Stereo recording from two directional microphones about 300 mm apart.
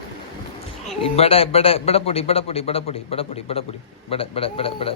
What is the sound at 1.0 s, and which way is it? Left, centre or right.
A man's voice, centre.